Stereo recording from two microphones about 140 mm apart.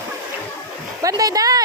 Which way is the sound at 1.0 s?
25° right (ahead or behind).